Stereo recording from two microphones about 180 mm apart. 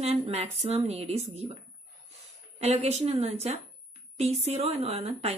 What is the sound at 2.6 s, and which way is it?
Speech, 35° right (ahead or behind).